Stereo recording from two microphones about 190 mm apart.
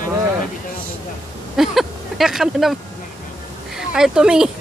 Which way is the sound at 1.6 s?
Centre (ahead or behind).